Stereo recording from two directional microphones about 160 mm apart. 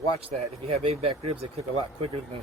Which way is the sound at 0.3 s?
40° right (ahead or behind).